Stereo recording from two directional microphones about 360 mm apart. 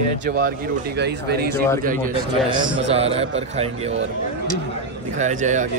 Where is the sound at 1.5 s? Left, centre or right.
Centre.